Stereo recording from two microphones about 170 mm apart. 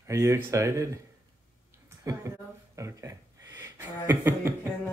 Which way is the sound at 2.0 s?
20° right (ahead or behind).